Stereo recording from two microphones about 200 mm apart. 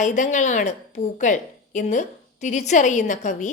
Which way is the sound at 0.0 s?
35° left (ahead or behind).